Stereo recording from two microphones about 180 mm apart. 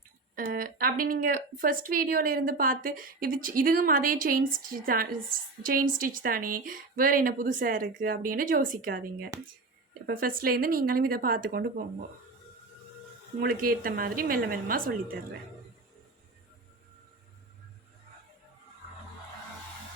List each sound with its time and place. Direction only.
0.5 s a woman's voice: 55° right (ahead or behind)
13.4 s a woman's voice: 55° right (ahead or behind)